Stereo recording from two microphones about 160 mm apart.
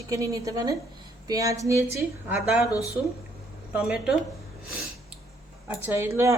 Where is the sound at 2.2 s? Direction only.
10° right (ahead or behind).